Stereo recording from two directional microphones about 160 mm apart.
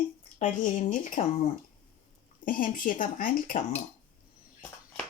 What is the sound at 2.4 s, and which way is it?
Speech, 60° left (ahead or behind).